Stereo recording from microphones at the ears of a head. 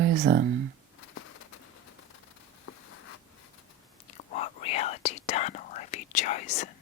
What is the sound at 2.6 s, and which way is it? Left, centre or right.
Zipper, left.